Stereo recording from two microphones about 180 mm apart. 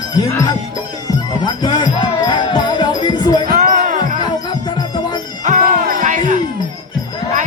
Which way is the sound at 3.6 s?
45° right (ahead or behind).